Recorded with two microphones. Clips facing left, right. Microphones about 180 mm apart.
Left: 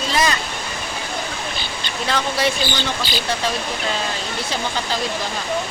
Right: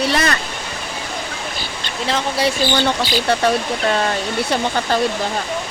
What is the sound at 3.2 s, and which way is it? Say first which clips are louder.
Speech: right 7 dB; 60° right (ahead or behind).